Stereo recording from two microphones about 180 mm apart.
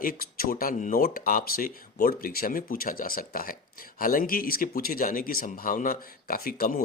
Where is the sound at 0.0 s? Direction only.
55° left (ahead or behind).